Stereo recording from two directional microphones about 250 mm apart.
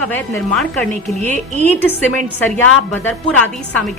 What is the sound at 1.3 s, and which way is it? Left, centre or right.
Speech, right.